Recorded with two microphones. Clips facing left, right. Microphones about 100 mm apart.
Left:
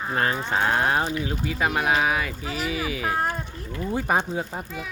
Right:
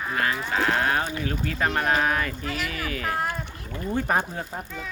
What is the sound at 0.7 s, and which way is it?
Speech, 20° left (ahead or behind).